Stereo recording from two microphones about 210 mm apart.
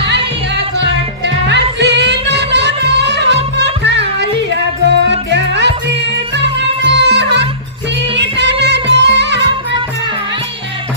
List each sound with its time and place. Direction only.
0.7 s music: 55° right (ahead or behind)